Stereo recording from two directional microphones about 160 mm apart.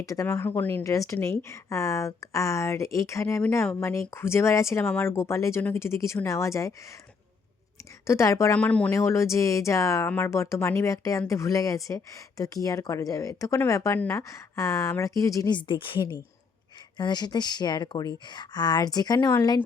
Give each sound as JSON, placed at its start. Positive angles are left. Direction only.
{"t": 0.0, "sound": "a woman's voice", "side_deg": 20}
{"t": 8.0, "sound": "a woman's voice", "side_deg": 20}